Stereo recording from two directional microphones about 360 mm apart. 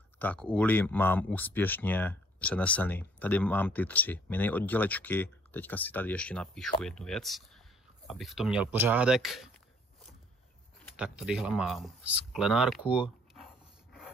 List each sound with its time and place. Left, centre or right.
0.2 s speech: centre
11.0 s speech: centre